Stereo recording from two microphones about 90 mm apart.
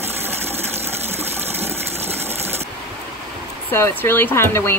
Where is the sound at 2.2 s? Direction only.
25° right (ahead or behind).